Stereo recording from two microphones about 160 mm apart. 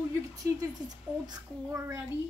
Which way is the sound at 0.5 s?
25° right (ahead or behind).